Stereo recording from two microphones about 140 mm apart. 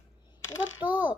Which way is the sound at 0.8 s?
10° right (ahead or behind).